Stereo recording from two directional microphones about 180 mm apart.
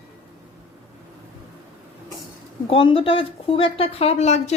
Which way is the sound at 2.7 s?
30° left (ahead or behind).